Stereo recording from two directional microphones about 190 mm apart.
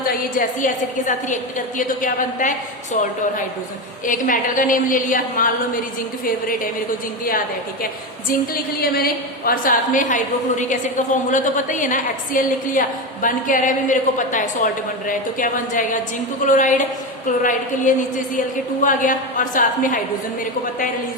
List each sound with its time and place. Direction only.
0.0 s a woman's voice: 50° left (ahead or behind)
4.0 s a woman's voice: 45° left (ahead or behind)
7.3 s a woman's voice: 50° left (ahead or behind)